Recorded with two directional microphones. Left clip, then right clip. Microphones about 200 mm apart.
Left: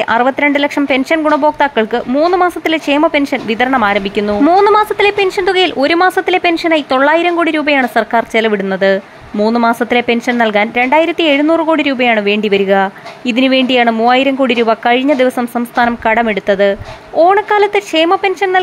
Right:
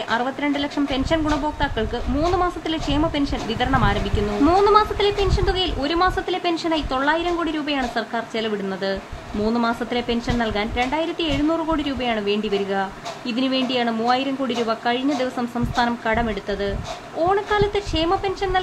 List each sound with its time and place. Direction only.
0.1 s speech: 30° left (ahead or behind)